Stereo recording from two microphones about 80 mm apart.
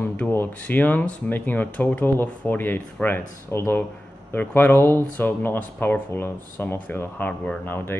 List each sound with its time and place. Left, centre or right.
0.3 s speech: left